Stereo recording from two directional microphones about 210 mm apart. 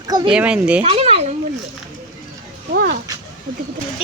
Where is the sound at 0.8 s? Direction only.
30° right (ahead or behind).